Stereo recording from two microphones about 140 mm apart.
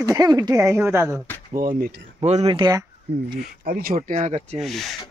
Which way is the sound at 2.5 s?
35° right (ahead or behind).